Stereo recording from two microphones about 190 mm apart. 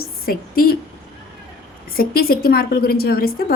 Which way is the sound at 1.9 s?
50° left (ahead or behind).